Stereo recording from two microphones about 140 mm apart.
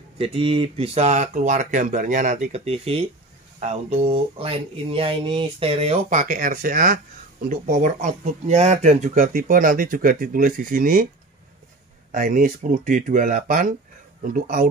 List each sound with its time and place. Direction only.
0.2 s speech: 40° right (ahead or behind); by 7.0 s 85° right
7.4 s speech: 70° right (ahead or behind)
12.1 s speech: 75° right (ahead or behind)